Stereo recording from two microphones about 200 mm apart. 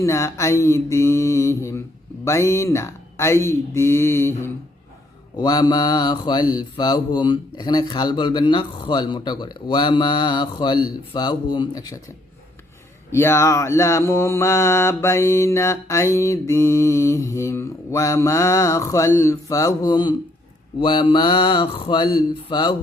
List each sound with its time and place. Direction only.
0.0 s mantra: 15° left (ahead or behind)
5.4 s speech: 20° left (ahead or behind)
13.1 s mantra: 10° left (ahead or behind)
20.8 s speech: 25° left (ahead or behind)